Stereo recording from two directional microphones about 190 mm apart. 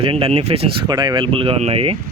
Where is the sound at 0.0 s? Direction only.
30° right (ahead or behind).